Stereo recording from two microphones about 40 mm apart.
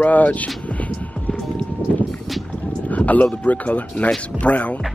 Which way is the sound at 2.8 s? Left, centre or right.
Left.